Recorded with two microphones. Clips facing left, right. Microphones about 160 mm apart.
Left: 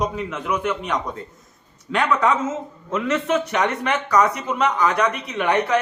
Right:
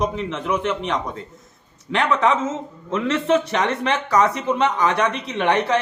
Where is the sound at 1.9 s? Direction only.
20° right (ahead or behind).